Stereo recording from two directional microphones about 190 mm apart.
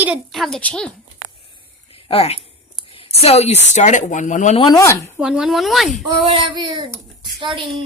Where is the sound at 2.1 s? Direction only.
30° left (ahead or behind).